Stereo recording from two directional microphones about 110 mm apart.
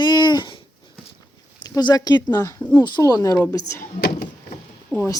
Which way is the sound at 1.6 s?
35° left (ahead or behind).